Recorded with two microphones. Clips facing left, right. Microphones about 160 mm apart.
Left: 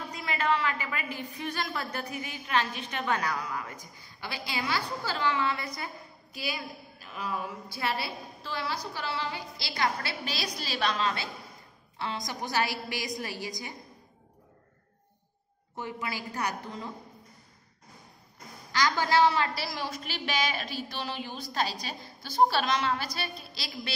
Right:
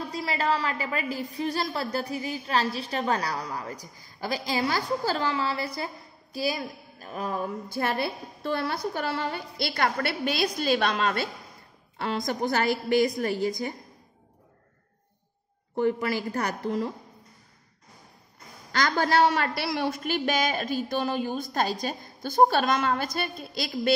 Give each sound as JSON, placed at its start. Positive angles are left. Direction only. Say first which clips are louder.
{"t": 0.1, "sound": "a woman's voice", "louder": "right 1 dB", "side_deg": -35}
{"t": 15.8, "sound": "a woman's voice", "louder": "right 11 dB", "side_deg": -50}
{"t": 18.7, "sound": "a woman's voice", "louder": "right 2 dB", "side_deg": -55}